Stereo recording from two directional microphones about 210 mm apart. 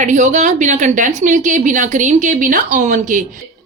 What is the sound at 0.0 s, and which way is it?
A woman's voice, 35° right (ahead or behind).